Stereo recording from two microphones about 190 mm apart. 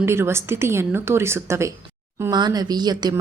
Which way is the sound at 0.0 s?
15° right (ahead or behind).